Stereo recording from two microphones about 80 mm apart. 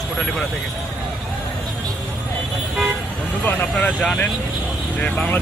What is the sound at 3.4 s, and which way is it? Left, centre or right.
Speech, centre.